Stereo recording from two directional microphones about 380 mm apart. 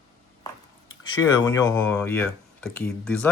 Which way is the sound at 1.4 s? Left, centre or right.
Centre.